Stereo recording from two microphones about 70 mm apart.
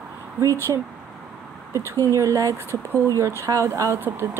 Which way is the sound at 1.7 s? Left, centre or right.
Right.